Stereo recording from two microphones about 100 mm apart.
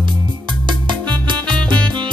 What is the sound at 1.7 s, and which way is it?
Music, 50° right (ahead or behind).